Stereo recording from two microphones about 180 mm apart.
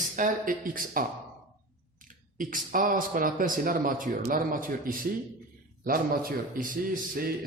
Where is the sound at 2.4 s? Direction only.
50° right (ahead or behind).